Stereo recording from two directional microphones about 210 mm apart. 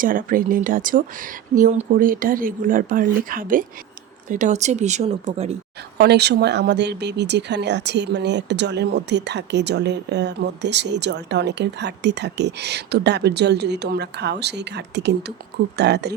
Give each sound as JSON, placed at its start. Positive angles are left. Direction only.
{"t": 0.0, "sound": "speech", "side_deg": -40}
{"t": 6.0, "sound": "speech", "side_deg": -50}